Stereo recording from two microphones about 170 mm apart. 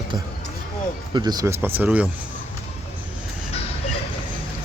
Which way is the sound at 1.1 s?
25° right (ahead or behind).